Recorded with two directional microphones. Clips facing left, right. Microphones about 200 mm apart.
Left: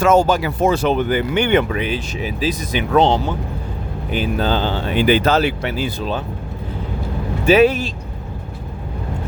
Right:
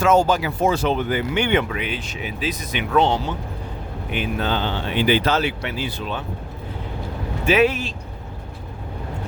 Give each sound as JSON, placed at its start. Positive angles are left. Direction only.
{"t": 0.0, "sound": "speech", "side_deg": 50}
{"t": 1.4, "sound": "speech", "side_deg": 45}
{"t": 4.1, "sound": "speech", "side_deg": 35}
{"t": 7.4, "sound": "speech", "side_deg": 35}